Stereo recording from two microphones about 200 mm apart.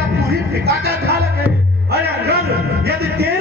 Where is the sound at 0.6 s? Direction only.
55° right (ahead or behind).